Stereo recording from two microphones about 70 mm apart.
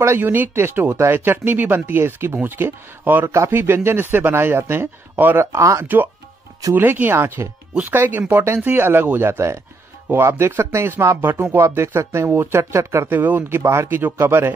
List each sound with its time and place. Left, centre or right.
0.0 s speech: right
0.8 s speech: right
1.1 s speech: right
5.4 s speech: right
6.7 s speech: right
13.1 s speech: right